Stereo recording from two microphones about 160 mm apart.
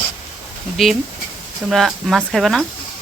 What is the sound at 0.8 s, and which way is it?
Speech, centre (ahead or behind).